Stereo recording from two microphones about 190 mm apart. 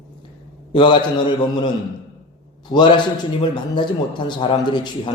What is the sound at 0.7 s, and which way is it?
A man's voice, 25° left (ahead or behind).